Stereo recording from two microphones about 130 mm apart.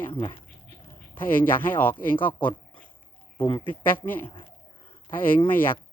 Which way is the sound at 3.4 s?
40° left (ahead or behind).